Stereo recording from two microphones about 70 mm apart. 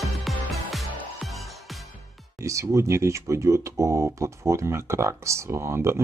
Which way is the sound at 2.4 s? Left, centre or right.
Right.